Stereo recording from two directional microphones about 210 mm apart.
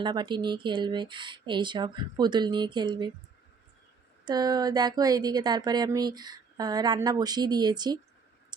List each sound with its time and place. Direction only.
0.0 s speech: 20° right (ahead or behind)
4.3 s speech: 20° right (ahead or behind)